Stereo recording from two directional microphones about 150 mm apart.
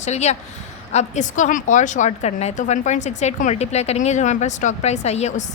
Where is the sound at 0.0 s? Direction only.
50° left (ahead or behind).